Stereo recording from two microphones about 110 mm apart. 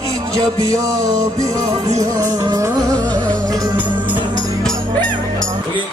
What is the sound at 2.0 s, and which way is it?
Music, 35° right (ahead or behind).